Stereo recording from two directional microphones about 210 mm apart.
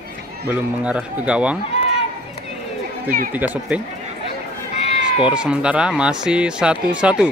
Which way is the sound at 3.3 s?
5° right (ahead or behind).